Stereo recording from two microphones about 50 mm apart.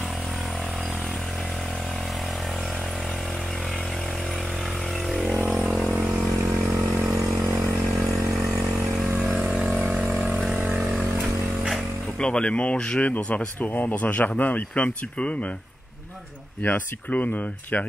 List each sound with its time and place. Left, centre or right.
6.0 s vehicle: centre
7.4 s vehicle: centre
8.3 s vehicle: centre
9.5 s vehicle: centre
12.2 s speech: left
13.0 s speech: left
16.6 s speech: left